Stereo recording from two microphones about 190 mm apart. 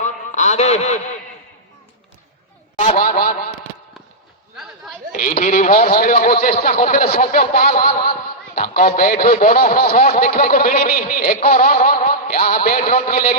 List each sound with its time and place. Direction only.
0.0 s a sound: 40° left (ahead or behind)
2.7 s a man's voice: 45° left (ahead or behind)
5.1 s a man's voice: 45° left (ahead or behind)